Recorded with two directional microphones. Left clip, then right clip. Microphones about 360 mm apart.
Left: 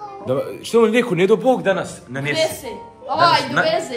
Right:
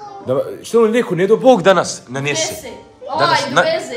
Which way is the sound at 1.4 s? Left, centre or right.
Right.